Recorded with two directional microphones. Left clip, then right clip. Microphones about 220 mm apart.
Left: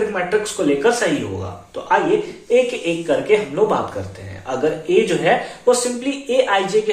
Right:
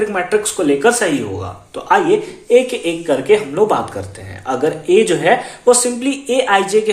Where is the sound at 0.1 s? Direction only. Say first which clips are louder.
Right 3 dB; 50° right (ahead or behind).